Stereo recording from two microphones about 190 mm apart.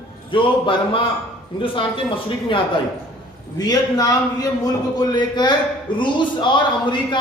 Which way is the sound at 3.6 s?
20° left (ahead or behind).